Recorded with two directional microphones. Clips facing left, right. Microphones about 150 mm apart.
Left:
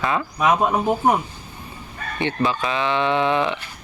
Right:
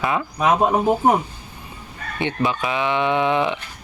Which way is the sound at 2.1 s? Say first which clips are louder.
Even; 15° right (ahead or behind).